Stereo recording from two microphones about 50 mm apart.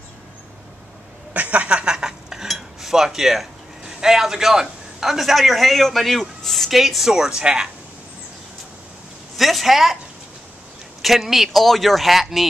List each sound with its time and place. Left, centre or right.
1.3 s a sound: right; by 2.4 s centre
2.4 s speech: centre
9.4 s speech: centre
11.0 s speech: centre